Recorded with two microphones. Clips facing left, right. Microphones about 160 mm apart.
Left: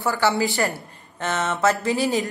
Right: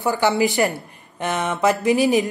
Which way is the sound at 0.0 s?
15° right (ahead or behind).